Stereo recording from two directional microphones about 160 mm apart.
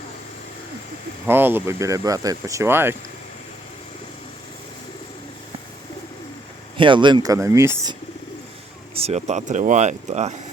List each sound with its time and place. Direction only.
1.3 s speech: 15° right (ahead or behind)
6.7 s speech: 30° right (ahead or behind)
9.0 s speech: 45° right (ahead or behind)